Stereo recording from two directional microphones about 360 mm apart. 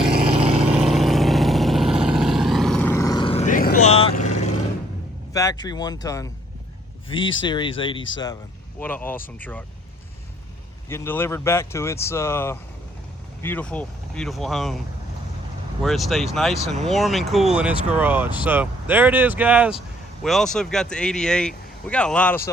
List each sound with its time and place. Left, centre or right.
0.6 s vehicle: centre
5.3 s speech: centre
10.8 s speech: centre
15.8 s speech: centre